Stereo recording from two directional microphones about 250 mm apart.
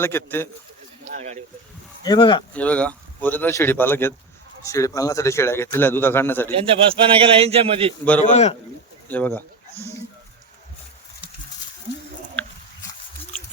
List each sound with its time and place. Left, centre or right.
0.0 s a man's voice: centre
1.0 s speech: right
2.0 s a man's voice: centre
2.5 s a man's voice: centre
6.5 s a man's voice: right
8.2 s a man's voice: left
9.0 s a man's voice: centre
12.4 s a sound: centre